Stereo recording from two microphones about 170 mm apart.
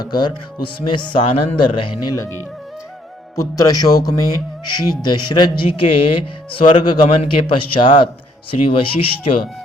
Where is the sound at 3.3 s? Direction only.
20° left (ahead or behind).